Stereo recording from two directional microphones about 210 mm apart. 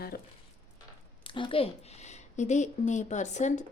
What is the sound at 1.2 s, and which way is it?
A woman's voice, 25° left (ahead or behind).